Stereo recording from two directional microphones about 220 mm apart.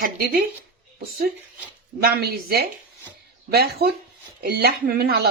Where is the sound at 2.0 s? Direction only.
45° right (ahead or behind).